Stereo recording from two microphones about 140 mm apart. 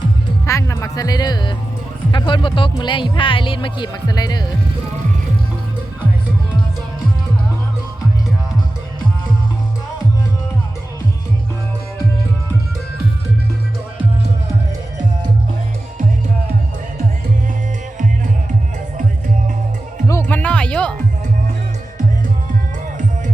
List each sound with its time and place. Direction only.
0.4 s speech: 20° left (ahead or behind)
20.1 s music: 15° left (ahead or behind)